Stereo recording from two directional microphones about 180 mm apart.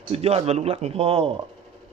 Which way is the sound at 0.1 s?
35° right (ahead or behind).